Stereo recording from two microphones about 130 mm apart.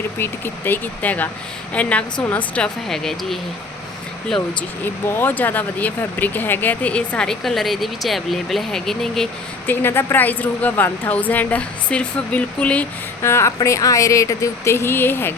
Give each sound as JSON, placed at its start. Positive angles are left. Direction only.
{"t": 0.2, "sound": "speech", "side_deg": 15}
{"t": 2.9, "sound": "speech", "side_deg": 5}
{"t": 5.0, "sound": "speech", "side_deg": 15}
{"t": 9.6, "sound": "speech", "side_deg": 15}